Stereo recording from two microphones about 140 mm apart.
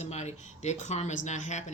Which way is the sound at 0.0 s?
50° left (ahead or behind).